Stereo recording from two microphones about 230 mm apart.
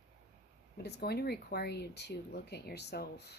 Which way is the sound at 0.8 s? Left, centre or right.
Left.